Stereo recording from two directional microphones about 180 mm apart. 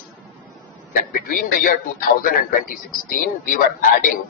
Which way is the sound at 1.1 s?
50° left (ahead or behind).